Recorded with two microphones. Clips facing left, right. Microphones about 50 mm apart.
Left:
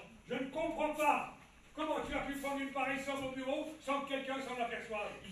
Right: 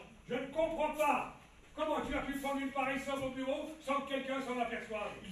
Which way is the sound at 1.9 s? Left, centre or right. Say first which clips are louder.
Right 1 dB; right.